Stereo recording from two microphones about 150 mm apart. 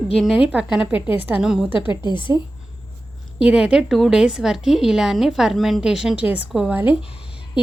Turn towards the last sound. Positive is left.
turn(degrees=-5)  # may be behind; listen again after turning